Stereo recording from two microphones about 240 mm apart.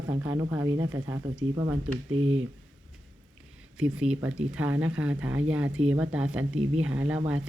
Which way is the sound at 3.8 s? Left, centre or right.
Centre.